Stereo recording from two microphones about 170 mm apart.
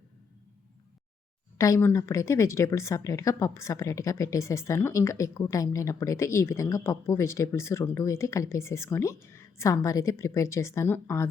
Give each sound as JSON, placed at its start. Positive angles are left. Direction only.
{"t": 1.5, "sound": "a woman's voice", "side_deg": 20}